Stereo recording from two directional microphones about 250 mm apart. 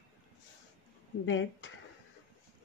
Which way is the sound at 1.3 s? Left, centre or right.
Left.